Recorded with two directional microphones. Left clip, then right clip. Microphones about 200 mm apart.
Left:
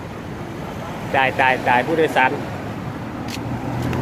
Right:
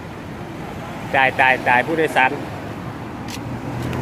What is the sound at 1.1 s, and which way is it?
Speech, 30° right (ahead or behind).